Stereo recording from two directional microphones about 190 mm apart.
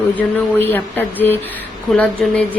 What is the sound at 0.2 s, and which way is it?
Speech, 10° left (ahead or behind).